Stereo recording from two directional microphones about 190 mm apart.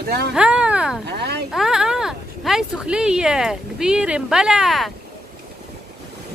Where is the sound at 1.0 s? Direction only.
60° right (ahead or behind).